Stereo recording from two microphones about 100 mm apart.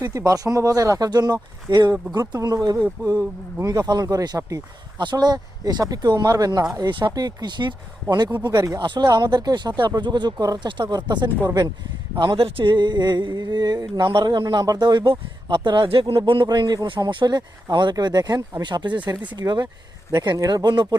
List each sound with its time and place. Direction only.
0.0 s speech: 35° right (ahead or behind); by 7.8 s 50° right (ahead or behind)
8.4 s speech: 40° right (ahead or behind)
8.8 s speech: 50° right (ahead or behind)
12.1 s speech: 50° right (ahead or behind)